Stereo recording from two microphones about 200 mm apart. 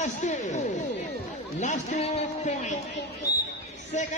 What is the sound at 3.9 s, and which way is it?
Speech, 35° left (ahead or behind).